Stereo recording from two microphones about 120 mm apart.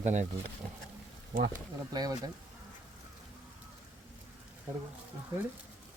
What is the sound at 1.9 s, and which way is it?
Speech, 30° right (ahead or behind).